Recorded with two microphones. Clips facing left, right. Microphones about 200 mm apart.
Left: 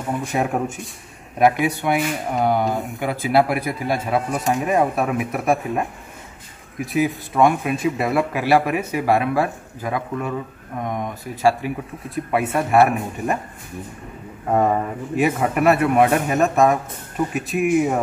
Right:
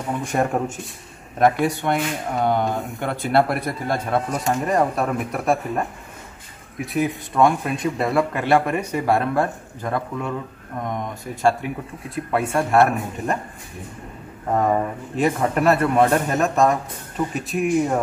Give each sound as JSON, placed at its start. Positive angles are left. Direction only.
{"t": 0.2, "sound": "speech", "side_deg": 0}
{"t": 1.9, "sound": "speech", "side_deg": 5}
{"t": 14.5, "sound": "speech", "side_deg": 5}